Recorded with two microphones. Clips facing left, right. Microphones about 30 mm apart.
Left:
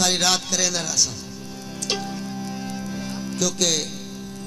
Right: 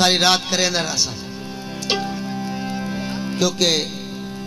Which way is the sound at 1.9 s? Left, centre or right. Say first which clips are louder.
Right 5 dB; right.